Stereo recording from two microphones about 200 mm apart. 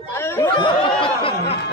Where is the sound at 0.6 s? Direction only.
25° left (ahead or behind).